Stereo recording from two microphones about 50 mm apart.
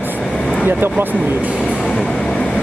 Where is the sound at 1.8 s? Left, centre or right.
Centre.